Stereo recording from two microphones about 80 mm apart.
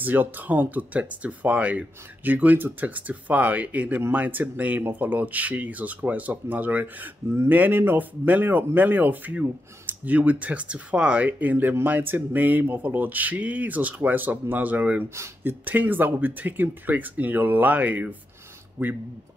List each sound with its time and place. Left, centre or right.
0.0 s speech: right